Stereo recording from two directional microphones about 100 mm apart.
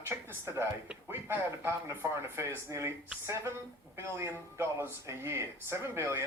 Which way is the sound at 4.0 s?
25° right (ahead or behind).